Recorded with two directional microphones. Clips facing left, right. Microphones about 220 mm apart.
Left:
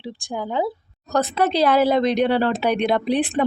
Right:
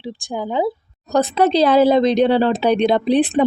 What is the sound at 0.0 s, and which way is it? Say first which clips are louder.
Speech: right 3 dB; 15° right (ahead or behind).